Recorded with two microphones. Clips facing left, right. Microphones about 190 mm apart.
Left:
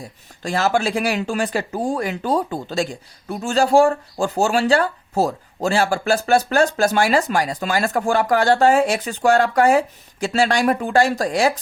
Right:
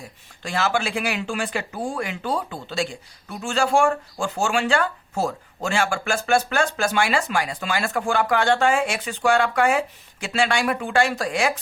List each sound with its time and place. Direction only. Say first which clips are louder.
0.4 s speech: left 4 dB; 40° left (ahead or behind)